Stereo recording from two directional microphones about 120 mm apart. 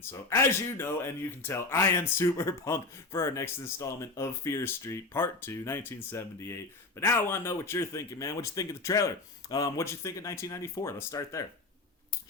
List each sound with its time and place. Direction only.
0.0 s speech: 20° left (ahead or behind)